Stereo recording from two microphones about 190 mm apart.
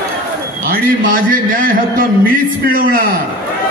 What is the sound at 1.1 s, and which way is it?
A man's voice, 45° right (ahead or behind).